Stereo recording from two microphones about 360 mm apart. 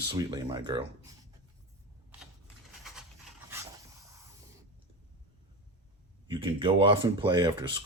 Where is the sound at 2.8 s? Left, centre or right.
Centre.